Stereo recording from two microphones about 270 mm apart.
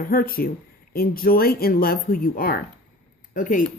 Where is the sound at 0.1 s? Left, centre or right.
Left.